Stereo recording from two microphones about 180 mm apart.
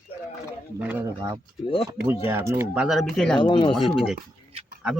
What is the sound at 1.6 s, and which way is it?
Speech, 30° left (ahead or behind).